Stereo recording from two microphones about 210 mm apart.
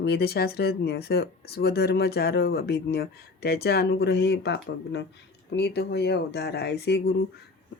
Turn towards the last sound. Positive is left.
turn(degrees=50)  # may be behind; listen again after turning